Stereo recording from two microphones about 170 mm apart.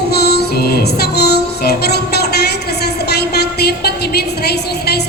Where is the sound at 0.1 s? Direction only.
70° left (ahead or behind).